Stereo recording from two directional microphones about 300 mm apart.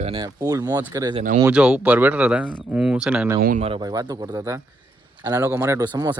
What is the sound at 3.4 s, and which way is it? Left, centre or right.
Speech, right.